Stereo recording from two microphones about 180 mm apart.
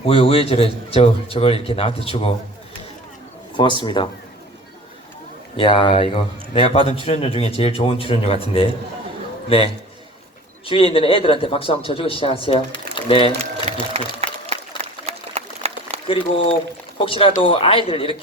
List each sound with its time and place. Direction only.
0.0 s a man's voice: 30° left (ahead or behind)
3.6 s speech: 25° left (ahead or behind)
5.5 s a man's voice: 30° left (ahead or behind)
10.7 s a man's voice: 30° left (ahead or behind)
14.2 s a sound: 35° right (ahead or behind)
16.0 s a man's voice: 30° left (ahead or behind)